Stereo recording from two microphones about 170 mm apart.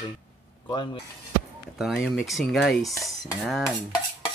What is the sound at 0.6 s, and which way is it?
Speech, 25° left (ahead or behind).